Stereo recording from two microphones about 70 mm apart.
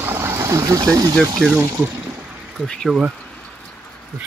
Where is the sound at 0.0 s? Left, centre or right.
Right.